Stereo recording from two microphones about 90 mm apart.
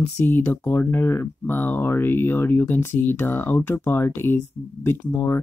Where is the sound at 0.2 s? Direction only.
25° left (ahead or behind).